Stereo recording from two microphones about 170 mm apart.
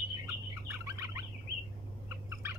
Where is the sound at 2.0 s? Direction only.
15° right (ahead or behind).